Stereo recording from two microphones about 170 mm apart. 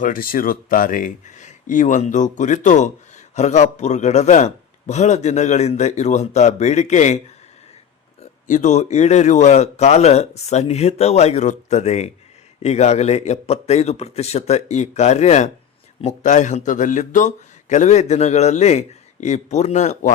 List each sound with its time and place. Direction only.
0.0 s a man's voice: 55° left (ahead or behind)
8.2 s a man's voice: 45° left (ahead or behind)